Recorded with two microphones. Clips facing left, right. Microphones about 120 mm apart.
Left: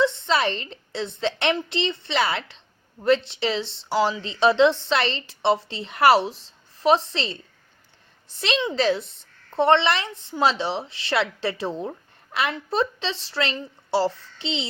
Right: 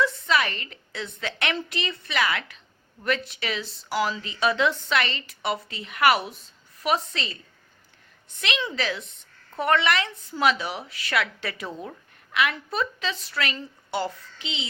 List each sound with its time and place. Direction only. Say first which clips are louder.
0.0 s a woman's voice: left 3 dB; 25° left (ahead or behind)